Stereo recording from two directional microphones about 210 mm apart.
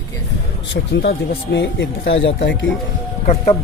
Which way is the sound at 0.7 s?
55° left (ahead or behind).